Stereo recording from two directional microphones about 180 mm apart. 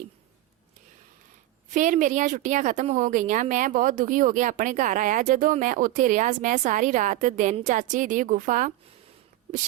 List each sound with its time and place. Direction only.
1.7 s a woman's voice: 45° right (ahead or behind)